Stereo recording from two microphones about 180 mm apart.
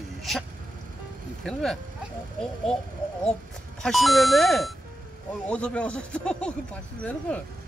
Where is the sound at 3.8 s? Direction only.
Centre (ahead or behind).